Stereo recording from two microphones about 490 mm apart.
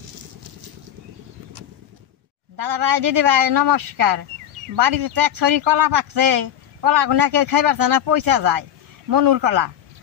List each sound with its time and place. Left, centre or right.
2.5 s speech: right